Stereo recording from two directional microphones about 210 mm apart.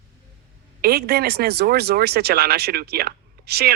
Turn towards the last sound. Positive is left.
turn(degrees=-50)  # may be behind; listen again after turning